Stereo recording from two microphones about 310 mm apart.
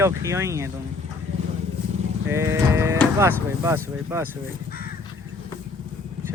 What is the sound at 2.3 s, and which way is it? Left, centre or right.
Speech, centre.